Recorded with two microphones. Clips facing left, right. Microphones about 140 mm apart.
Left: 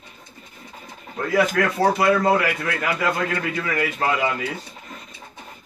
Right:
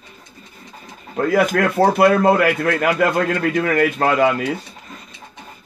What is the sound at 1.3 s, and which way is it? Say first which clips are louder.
Speech: right 3 dB; 60° right (ahead or behind).